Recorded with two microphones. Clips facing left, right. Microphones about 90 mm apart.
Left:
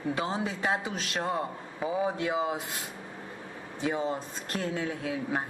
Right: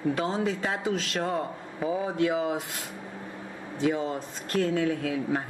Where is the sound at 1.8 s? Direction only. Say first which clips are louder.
Right 3 dB; centre (ahead or behind).